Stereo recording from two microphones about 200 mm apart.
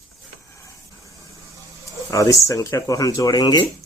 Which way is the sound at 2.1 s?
15° left (ahead or behind).